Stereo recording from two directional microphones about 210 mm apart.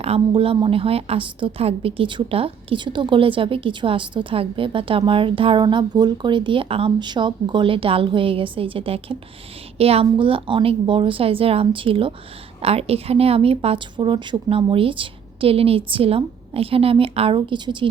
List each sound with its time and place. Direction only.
0.0 s a woman's voice: 25° right (ahead or behind)